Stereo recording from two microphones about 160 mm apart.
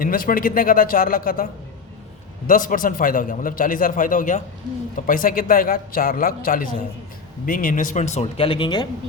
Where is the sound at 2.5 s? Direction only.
55° left (ahead or behind); by 8.9 s 30° left (ahead or behind).